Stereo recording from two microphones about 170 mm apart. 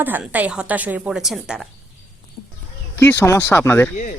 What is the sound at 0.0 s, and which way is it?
A woman's voice, 10° right (ahead or behind).